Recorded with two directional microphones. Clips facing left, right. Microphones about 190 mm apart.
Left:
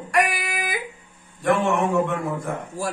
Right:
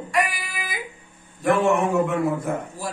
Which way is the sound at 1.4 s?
Centre (ahead or behind).